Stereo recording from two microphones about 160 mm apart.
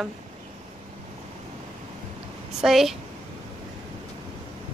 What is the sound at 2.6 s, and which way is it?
Speech, centre (ahead or behind).